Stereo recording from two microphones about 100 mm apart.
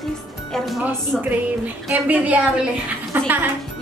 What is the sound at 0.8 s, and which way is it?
A woman's voice, 15° right (ahead or behind).